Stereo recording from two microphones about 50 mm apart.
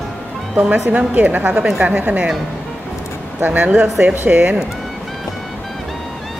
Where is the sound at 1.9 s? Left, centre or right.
Right.